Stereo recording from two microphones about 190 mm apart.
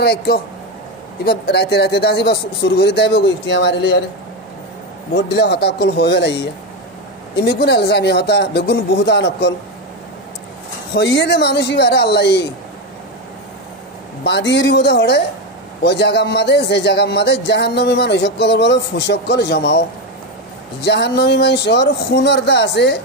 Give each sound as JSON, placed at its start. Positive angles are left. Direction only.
{"t": 0.0, "sound": "a man's voice", "side_deg": 55}
{"t": 5.1, "sound": "a man's voice", "side_deg": 60}
{"t": 10.9, "sound": "a man's voice", "side_deg": 60}
{"t": 14.2, "sound": "a man's voice", "side_deg": 60}
{"t": 20.8, "sound": "a man's voice", "side_deg": 60}